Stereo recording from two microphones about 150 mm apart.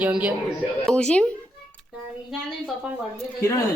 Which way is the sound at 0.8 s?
5° left (ahead or behind).